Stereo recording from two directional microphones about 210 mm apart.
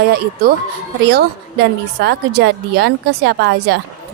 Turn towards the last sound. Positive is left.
turn(degrees=-50)  # may be behind; listen again after turning